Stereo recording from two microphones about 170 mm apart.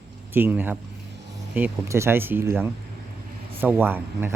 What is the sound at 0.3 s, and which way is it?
Speech, 10° right (ahead or behind).